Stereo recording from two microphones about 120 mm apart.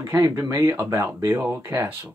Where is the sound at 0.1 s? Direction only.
30° right (ahead or behind).